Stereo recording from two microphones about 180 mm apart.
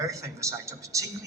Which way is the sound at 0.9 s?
15° right (ahead or behind).